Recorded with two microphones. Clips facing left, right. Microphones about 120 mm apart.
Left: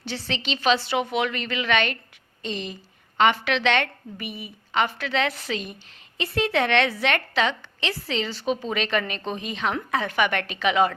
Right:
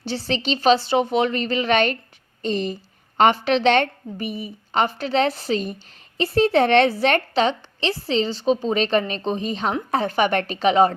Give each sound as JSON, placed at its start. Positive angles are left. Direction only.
{"t": 0.0, "sound": "a woman's voice", "side_deg": -35}